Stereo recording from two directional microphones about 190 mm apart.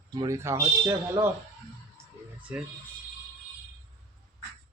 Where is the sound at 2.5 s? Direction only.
10° right (ahead or behind).